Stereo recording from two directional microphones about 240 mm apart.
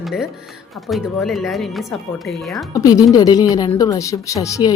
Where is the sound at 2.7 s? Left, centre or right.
Centre.